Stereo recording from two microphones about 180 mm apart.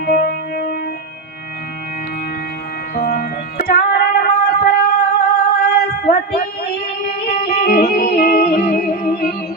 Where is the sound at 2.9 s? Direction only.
55° left (ahead or behind).